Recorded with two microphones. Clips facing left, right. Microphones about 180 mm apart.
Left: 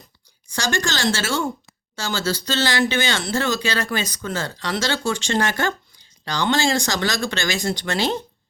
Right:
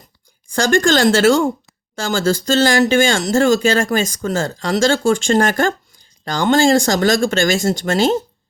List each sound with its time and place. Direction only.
0.5 s speech: 50° right (ahead or behind)